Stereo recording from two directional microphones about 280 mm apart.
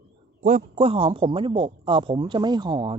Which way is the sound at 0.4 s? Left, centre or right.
Right.